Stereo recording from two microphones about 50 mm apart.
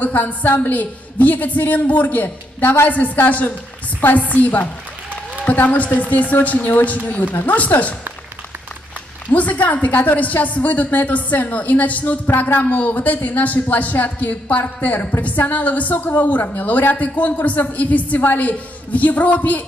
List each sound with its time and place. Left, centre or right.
0.0 s a woman's voice: left
9.3 s a woman's voice: left